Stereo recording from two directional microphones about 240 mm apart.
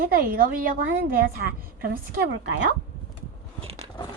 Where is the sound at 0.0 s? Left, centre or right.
Right.